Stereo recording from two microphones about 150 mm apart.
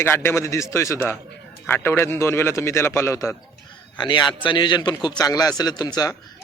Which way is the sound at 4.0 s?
30° left (ahead or behind).